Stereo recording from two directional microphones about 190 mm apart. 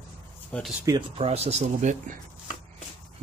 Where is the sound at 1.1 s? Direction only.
30° right (ahead or behind).